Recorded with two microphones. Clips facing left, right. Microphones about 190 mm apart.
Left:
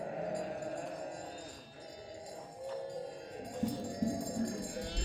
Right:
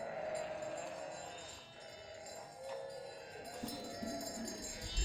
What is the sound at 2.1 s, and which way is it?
Clip-clop, 25° left (ahead or behind).